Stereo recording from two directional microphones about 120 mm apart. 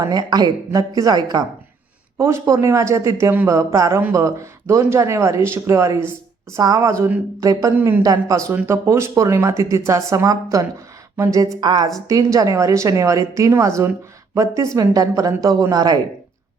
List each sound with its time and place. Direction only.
0.0 s a woman's voice: 30° right (ahead or behind)
2.1 s a woman's voice: 20° right (ahead or behind)
7.8 s a woman's voice: 15° right (ahead or behind)
8.0 s a woman's voice: 30° right (ahead or behind)